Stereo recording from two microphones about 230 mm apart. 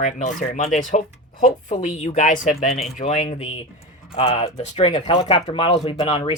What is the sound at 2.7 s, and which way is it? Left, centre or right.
Speech, centre.